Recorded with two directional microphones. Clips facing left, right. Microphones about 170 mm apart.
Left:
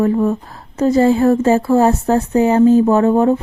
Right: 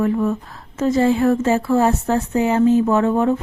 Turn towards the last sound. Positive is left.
turn(degrees=35)  # may be behind; listen again after turning